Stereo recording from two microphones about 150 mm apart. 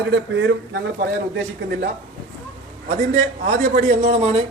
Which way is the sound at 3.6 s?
90° right.